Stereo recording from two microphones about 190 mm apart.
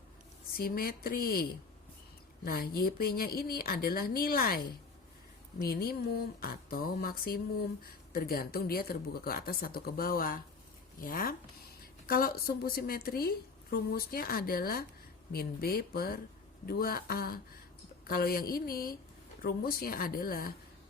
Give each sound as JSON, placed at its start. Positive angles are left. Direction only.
{"t": 0.5, "sound": "a woman's voice", "side_deg": 50}